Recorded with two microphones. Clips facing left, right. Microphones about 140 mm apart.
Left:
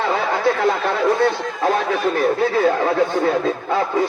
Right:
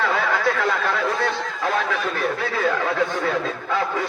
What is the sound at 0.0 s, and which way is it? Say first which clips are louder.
A man's voice: left 3 dB; 30° left (ahead or behind).